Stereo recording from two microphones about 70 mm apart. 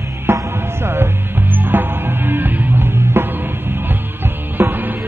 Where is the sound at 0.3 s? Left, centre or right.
Right.